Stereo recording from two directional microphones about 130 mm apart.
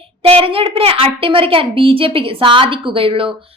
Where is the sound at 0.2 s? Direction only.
45° right (ahead or behind).